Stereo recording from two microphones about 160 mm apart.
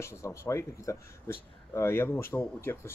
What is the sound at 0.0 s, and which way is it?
Speech, 20° left (ahead or behind).